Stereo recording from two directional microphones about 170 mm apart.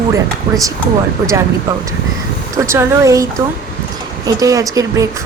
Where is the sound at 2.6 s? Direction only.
20° right (ahead or behind).